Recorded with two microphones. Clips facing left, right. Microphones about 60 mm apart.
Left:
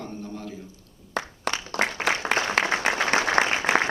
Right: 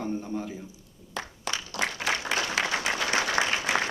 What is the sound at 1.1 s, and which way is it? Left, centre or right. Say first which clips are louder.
Applause: left 5 dB; left.